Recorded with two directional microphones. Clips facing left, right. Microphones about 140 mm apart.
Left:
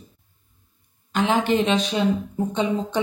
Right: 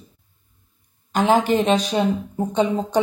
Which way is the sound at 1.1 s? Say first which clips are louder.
Right 3 dB; 40° right (ahead or behind).